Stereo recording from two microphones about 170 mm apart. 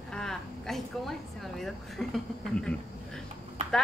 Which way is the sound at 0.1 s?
5° left (ahead or behind).